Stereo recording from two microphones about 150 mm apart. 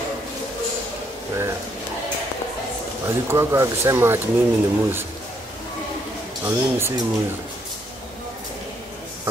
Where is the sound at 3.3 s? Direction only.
20° right (ahead or behind).